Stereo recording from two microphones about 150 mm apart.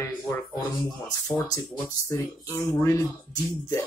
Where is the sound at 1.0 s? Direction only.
25° left (ahead or behind).